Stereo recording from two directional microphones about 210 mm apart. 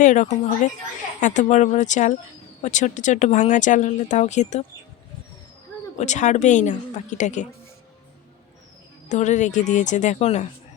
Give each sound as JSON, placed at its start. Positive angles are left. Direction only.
{"t": 0.0, "sound": "a woman's voice", "side_deg": 35}
{"t": 6.0, "sound": "a woman's voice", "side_deg": 35}
{"t": 9.0, "sound": "a woman's voice", "side_deg": 35}